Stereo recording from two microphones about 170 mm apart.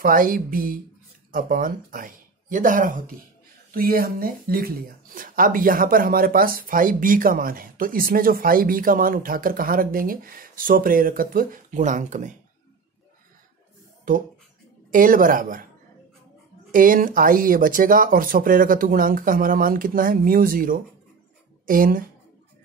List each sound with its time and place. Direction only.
0.0 s speech: 55° right (ahead or behind)
14.9 s a woman's voice: 55° right (ahead or behind)
16.7 s speech: 55° right (ahead or behind)